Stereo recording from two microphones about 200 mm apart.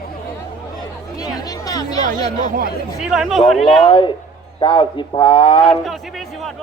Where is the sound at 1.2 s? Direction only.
20° left (ahead or behind).